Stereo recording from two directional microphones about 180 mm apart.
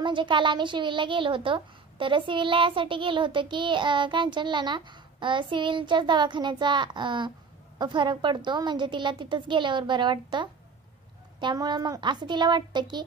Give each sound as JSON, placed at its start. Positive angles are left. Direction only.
{"t": 0.0, "sound": "a woman's voice", "side_deg": -25}